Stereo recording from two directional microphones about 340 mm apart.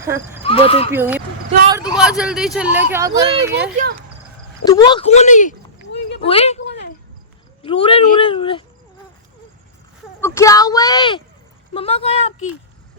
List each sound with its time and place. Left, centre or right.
0.4 s speech: centre
0.9 s speech: centre
3.5 s speech: right
4.6 s speech: centre; by 6.2 s left
6.2 s speech: centre
6.7 s cricket: left
7.6 s speech: centre
10.2 s speech: centre